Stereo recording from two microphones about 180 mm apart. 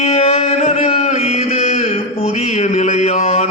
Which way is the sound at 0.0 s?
35° left (ahead or behind).